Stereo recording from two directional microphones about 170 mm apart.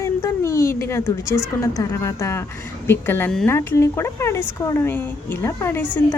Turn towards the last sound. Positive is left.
turn(degrees=15)  # may be behind; listen again after turning